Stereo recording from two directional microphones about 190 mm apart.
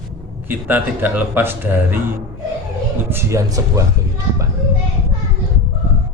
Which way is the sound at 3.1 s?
15° right (ahead or behind).